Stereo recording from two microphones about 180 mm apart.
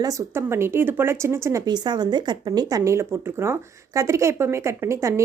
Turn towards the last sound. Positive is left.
turn(degrees=-15)  # may be behind; listen again after turning